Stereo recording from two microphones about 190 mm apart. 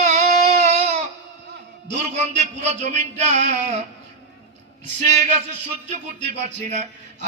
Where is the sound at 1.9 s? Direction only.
40° right (ahead or behind).